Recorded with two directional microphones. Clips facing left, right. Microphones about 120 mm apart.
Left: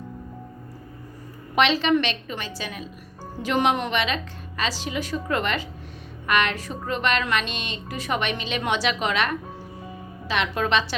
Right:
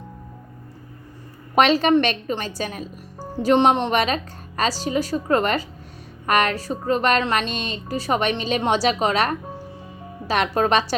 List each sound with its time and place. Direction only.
1.5 s a woman's voice: 45° right (ahead or behind)